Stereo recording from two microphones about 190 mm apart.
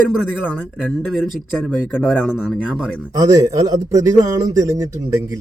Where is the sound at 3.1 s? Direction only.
20° right (ahead or behind).